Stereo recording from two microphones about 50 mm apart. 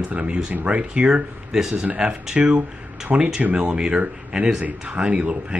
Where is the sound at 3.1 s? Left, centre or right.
Right.